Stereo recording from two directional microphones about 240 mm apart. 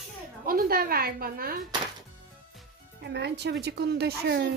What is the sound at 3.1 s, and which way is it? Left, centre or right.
A woman's voice, right.